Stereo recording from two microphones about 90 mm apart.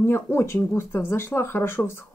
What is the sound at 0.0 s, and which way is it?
Speech, 25° left (ahead or behind).